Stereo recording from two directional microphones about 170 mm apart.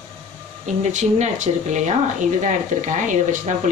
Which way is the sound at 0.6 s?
40° right (ahead or behind).